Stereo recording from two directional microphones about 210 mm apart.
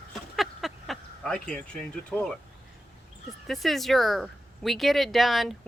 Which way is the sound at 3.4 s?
Centre (ahead or behind).